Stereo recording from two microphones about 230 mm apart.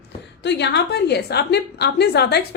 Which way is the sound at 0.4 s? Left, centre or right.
Left.